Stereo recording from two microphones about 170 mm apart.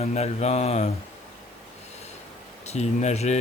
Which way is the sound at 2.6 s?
40° left (ahead or behind).